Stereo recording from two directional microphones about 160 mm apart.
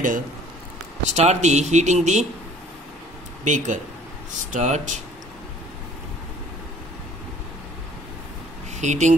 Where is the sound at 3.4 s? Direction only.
50° right (ahead or behind).